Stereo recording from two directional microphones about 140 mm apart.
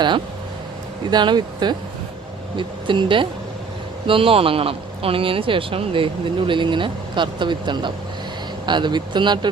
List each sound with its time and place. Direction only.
1.0 s speech: 30° right (ahead or behind)